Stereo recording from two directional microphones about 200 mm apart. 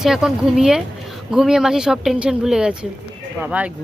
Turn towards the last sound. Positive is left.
turn(degrees=-5)  # may be behind; listen again after turning